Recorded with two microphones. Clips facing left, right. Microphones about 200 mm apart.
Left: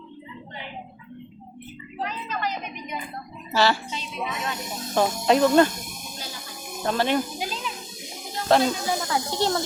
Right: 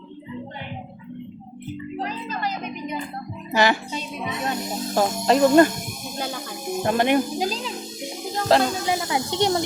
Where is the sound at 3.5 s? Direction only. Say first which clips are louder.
Right 2 dB; 15° right (ahead or behind).